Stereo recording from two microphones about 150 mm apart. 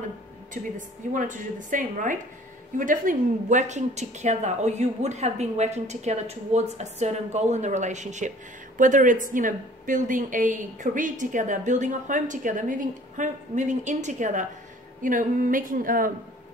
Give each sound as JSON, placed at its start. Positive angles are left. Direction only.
{"t": 0.7, "sound": "a woman's voice", "side_deg": -60}